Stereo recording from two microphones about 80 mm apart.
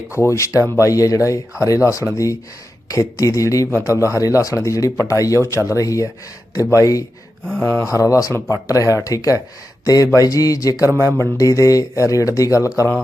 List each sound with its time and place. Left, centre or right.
0.1 s speech: left
7.6 s speech: left
8.1 s speech: left
10.9 s speech: right
11.3 s speech: left